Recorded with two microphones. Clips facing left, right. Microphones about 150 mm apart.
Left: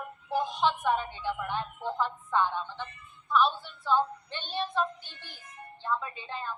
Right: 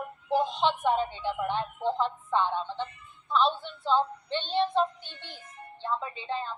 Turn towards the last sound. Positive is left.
turn(degrees=-20)  # may be behind; listen again after turning